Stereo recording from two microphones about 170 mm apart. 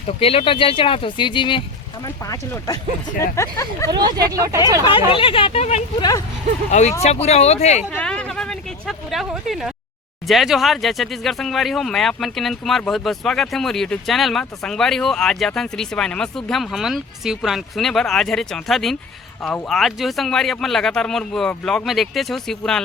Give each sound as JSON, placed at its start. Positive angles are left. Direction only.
{"t": 0.2, "sound": "speech", "side_deg": 35}
{"t": 3.9, "sound": "speech", "side_deg": -20}
{"t": 4.8, "sound": "speech", "side_deg": 30}
{"t": 6.0, "sound": "speech", "side_deg": 20}
{"t": 6.7, "sound": "speech", "side_deg": 45}
{"t": 7.9, "sound": "speech", "side_deg": 5}